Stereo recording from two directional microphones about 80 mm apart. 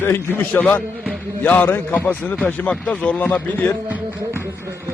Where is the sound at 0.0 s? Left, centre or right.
Left.